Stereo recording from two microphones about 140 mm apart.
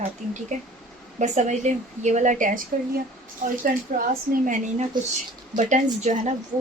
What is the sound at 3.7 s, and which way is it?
Speech, 90° right.